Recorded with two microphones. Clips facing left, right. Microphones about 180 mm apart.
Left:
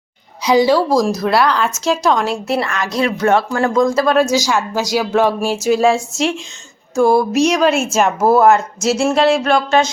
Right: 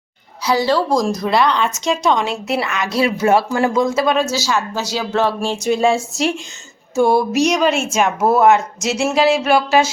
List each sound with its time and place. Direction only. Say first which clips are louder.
0.4 s speech: left 4 dB; 15° left (ahead or behind); by 4.2 s centre (ahead or behind)
4.2 s speech: left 4 dB; 15° left (ahead or behind); by 9.9 s 5° right (ahead or behind)